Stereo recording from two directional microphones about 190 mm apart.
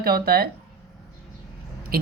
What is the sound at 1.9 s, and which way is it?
Speech, 50° right (ahead or behind).